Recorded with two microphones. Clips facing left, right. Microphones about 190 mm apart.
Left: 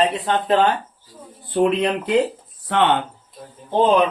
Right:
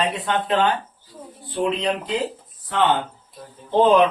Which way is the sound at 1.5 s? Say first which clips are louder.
Left 4 dB; 55° left (ahead or behind).